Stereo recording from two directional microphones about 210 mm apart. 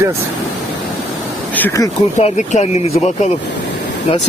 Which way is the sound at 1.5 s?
10° left (ahead or behind).